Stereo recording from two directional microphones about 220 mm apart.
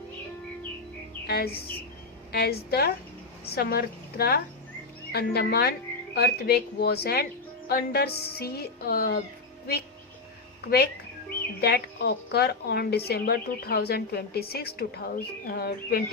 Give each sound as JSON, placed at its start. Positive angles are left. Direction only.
{"t": 1.3, "sound": "a woman's voice", "side_deg": 45}
{"t": 11.6, "sound": "a woman's voice", "side_deg": 50}